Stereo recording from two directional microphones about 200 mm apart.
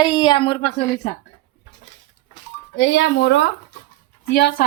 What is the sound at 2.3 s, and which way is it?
Speech, 65° left (ahead or behind).